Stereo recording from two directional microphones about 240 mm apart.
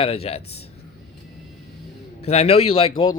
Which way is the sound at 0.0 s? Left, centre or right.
Left.